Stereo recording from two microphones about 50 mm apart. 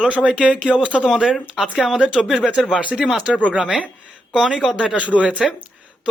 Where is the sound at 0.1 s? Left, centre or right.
Right.